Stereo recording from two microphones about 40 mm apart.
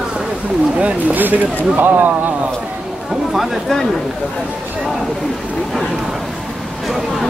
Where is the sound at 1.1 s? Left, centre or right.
Right.